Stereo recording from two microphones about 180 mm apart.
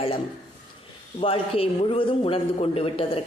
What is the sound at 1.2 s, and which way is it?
A man's voice, 30° left (ahead or behind).